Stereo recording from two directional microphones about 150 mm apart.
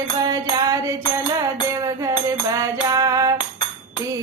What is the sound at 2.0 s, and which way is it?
Music, 20° right (ahead or behind).